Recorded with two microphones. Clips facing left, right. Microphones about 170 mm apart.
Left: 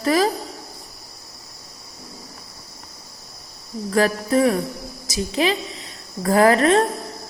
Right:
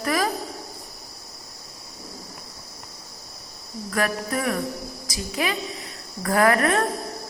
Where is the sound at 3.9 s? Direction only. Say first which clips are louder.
Left 7 dB; 30° left (ahead or behind).